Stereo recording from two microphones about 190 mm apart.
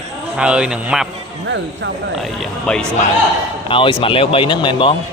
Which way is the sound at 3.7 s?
25° left (ahead or behind).